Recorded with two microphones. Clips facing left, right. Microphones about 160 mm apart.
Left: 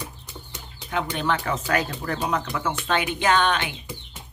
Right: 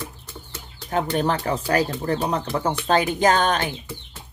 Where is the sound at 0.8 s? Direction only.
40° right (ahead or behind).